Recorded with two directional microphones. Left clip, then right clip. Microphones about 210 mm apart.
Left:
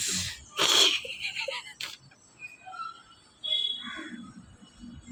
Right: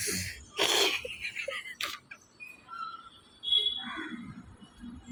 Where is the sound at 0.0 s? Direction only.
15° left (ahead or behind).